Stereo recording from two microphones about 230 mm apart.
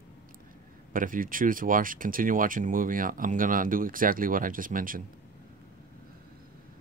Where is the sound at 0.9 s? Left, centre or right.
Right.